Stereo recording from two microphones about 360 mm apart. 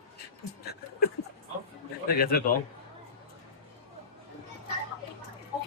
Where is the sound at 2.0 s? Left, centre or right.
Left.